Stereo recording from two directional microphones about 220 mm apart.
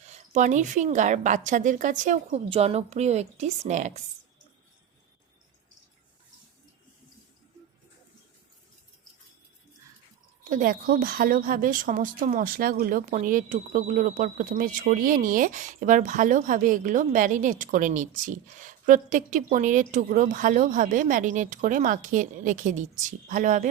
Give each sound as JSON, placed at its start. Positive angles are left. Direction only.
{"t": 0.0, "sound": "a woman's voice", "side_deg": -30}
{"t": 10.5, "sound": "a woman's voice", "side_deg": -40}